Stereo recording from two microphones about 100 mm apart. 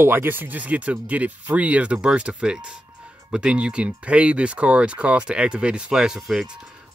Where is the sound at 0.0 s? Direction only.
20° right (ahead or behind).